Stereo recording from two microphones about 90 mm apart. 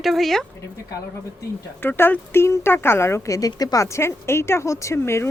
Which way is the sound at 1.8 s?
25° left (ahead or behind).